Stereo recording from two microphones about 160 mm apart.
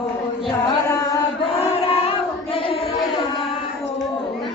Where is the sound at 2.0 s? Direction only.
35° left (ahead or behind).